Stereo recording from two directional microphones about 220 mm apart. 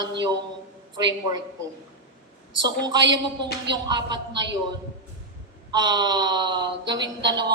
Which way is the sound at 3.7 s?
20° right (ahead or behind).